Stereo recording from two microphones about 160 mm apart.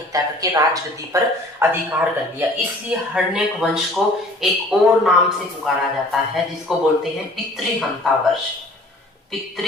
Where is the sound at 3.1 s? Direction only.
5° right (ahead or behind).